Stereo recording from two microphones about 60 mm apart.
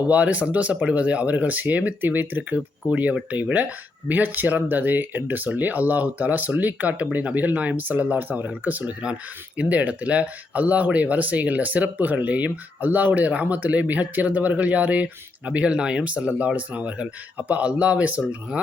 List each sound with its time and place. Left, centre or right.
0.1 s speech: right